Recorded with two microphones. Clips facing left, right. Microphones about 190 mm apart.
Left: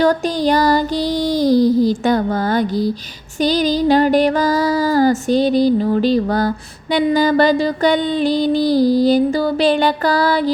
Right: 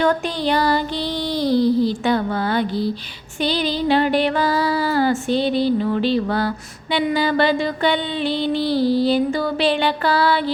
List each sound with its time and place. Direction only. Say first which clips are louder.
0.0 s music: left 4 dB; 40° left (ahead or behind)